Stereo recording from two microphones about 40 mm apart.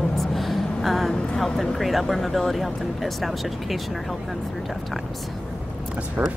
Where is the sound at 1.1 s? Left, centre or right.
Left.